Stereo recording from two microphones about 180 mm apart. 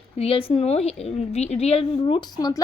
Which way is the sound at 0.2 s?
30° left (ahead or behind).